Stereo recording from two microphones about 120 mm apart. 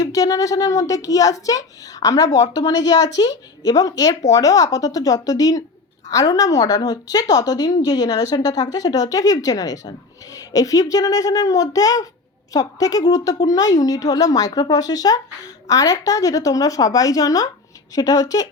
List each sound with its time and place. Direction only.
0.0 s a woman's voice: 30° left (ahead or behind)